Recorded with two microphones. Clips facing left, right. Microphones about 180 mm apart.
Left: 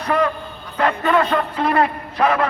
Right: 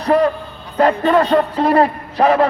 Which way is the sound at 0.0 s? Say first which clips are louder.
Right 5 dB; 35° right (ahead or behind).